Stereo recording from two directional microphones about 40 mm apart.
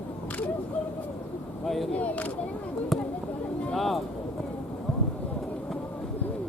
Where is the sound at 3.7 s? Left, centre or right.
Centre.